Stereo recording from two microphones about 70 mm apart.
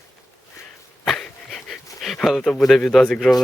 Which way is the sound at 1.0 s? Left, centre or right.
Centre.